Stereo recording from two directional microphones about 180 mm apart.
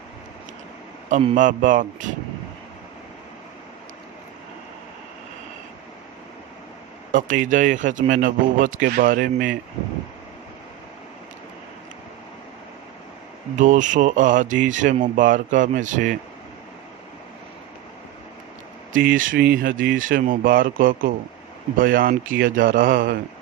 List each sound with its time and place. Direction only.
1.4 s a man's voice: 45° right (ahead or behind)
7.1 s a man's voice: 45° right (ahead or behind)
13.6 s a man's voice: 45° right (ahead or behind)
19.2 s speech: 90° right
19.6 s a man's voice: 50° right (ahead or behind)